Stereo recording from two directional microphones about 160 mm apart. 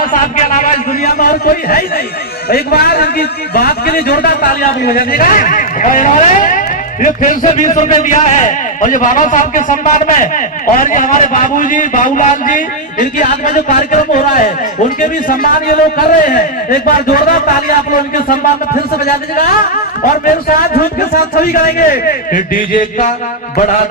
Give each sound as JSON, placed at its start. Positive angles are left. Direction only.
{"t": 0.0, "sound": "a man's voice", "side_deg": 55}
{"t": 1.1, "sound": "a man's voice", "side_deg": 65}